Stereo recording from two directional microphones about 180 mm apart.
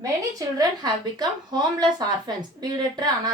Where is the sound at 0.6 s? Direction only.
25° right (ahead or behind).